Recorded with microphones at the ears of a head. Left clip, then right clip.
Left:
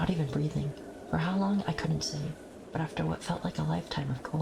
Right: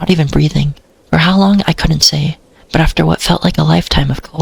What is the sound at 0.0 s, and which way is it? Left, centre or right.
Speech, right.